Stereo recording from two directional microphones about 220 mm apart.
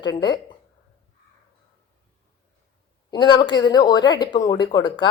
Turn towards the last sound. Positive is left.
turn(degrees=20)  # may be behind; listen again after turning